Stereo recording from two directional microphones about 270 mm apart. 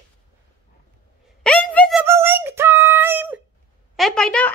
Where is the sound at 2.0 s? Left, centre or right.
Centre.